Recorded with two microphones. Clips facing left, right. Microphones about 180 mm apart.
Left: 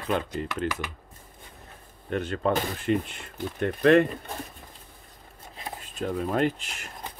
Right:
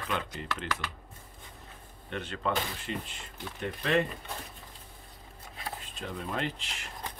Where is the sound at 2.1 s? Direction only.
45° left (ahead or behind).